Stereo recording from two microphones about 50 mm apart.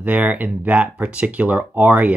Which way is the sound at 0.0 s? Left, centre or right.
Right.